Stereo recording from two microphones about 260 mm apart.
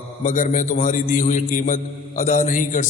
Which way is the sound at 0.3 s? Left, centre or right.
Left.